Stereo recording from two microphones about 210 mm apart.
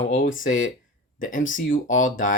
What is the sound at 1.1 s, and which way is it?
Speech, 40° left (ahead or behind).